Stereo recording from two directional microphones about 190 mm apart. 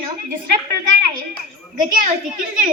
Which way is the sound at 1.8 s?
45° right (ahead or behind).